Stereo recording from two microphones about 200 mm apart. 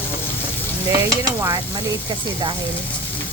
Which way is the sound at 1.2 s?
15° right (ahead or behind).